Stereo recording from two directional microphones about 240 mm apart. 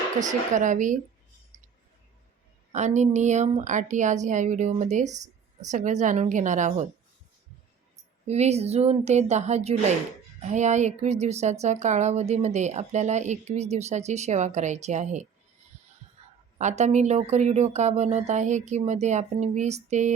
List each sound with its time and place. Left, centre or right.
0.2 s speech: right
2.7 s speech: right
8.3 s speech: right
16.6 s speech: right